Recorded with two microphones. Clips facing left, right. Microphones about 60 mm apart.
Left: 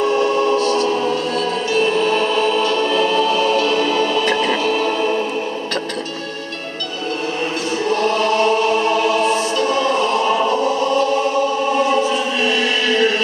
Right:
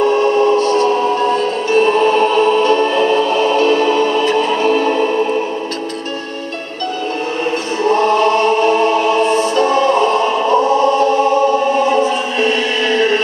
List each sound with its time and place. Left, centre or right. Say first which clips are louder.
0.6 s music: right 4 dB; right
4.3 s music: right 3 dB; left
7.9 s music: right 5 dB; right